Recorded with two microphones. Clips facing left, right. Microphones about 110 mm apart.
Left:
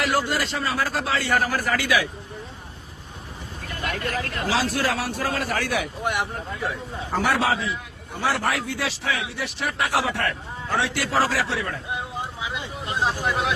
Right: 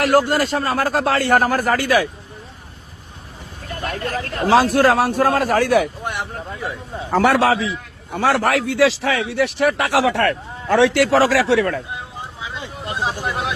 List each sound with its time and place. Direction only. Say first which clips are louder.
0.0 s a man's voice: right 8 dB; 50° right (ahead or behind)
3.7 s a man's voice: right 4 dB; 35° right (ahead or behind)
6.6 s a man's voice: even; centre (ahead or behind)
7.1 s speech: right 7 dB; 70° right (ahead or behind)
11.9 s a sound: left 1 dB; 20° left (ahead or behind)
12.7 s vehicle: right 1 dB; centre (ahead or behind)